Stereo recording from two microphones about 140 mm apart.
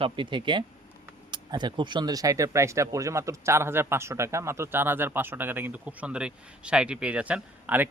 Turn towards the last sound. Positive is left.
turn(degrees=-10)  # may be behind; listen again after turning